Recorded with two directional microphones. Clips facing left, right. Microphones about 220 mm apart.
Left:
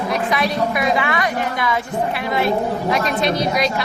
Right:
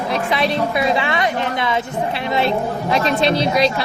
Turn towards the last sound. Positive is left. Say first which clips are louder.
# right 3 dB
turn(degrees=-30)  # may be behind; listen again after turning